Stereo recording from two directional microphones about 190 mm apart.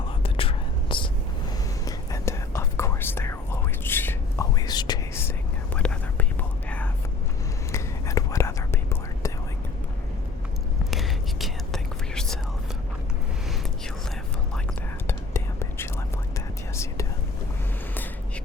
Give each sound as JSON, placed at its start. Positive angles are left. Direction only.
{"t": 0.2, "sound": "whispering", "side_deg": 30}
{"t": 5.7, "sound": "whispering", "side_deg": 5}
{"t": 10.9, "sound": "whispering", "side_deg": 0}
{"t": 15.0, "sound": "whispering", "side_deg": 15}